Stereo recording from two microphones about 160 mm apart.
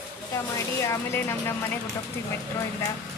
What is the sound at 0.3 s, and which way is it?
Speech, 20° left (ahead or behind).